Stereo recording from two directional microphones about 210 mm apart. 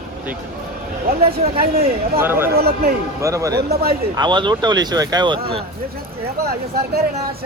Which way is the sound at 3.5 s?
50° right (ahead or behind).